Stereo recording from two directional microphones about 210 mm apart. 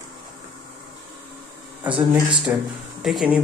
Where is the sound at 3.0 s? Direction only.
Centre (ahead or behind).